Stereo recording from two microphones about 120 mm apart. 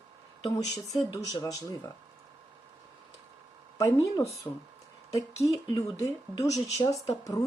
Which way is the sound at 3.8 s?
30° left (ahead or behind).